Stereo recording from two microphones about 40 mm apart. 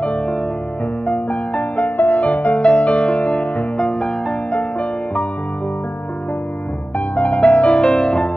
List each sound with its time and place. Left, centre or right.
0.0 s music: left
7.2 s music: left